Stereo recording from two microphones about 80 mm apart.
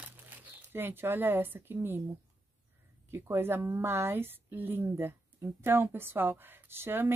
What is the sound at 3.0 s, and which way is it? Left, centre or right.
A woman's voice, right.